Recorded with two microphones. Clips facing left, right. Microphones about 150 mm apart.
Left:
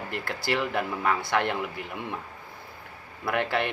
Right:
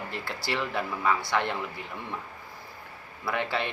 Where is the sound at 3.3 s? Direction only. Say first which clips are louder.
Left 3 dB; 55° left (ahead or behind).